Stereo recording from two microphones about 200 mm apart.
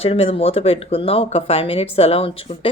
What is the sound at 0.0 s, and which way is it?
Speech, 30° left (ahead or behind).